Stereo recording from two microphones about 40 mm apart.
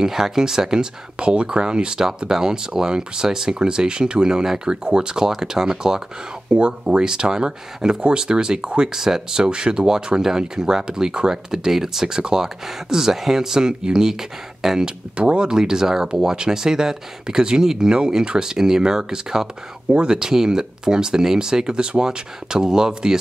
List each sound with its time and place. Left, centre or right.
0.0 s speech: centre
6.5 s speech: right
15.1 s speech: right
19.9 s speech: right
20.2 s speech: centre